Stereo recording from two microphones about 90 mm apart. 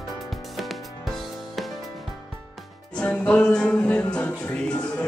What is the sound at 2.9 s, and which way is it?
Music, 10° left (ahead or behind).